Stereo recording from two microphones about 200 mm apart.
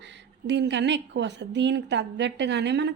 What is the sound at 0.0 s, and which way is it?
A woman's voice, 60° right (ahead or behind).